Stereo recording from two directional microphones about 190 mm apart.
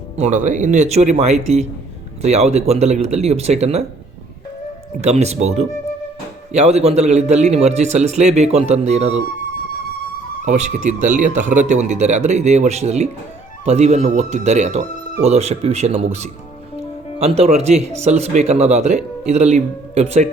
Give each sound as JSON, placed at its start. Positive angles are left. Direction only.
{"t": 0.2, "sound": "a man's voice", "side_deg": -40}
{"t": 4.9, "sound": "a man's voice", "side_deg": -35}
{"t": 10.4, "sound": "a man's voice", "side_deg": -40}